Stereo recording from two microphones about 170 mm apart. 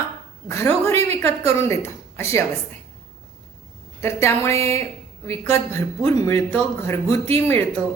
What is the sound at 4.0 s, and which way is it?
A woman's voice, 15° left (ahead or behind).